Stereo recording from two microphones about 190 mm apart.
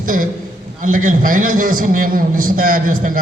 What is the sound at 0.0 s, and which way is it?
A man's voice, 45° right (ahead or behind).